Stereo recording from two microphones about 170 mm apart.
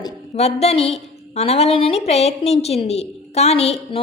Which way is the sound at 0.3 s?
40° left (ahead or behind).